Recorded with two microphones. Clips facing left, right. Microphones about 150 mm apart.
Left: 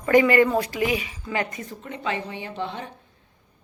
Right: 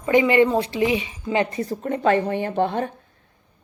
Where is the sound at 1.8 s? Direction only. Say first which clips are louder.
Right 10 dB; 50° right (ahead or behind).